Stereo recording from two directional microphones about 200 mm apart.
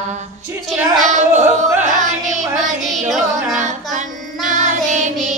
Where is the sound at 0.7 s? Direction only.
Centre (ahead or behind).